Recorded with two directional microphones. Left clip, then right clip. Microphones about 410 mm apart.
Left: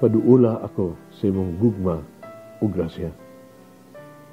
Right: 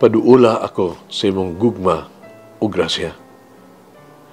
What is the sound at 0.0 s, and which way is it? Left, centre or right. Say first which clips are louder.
Speech: right 6 dB; centre.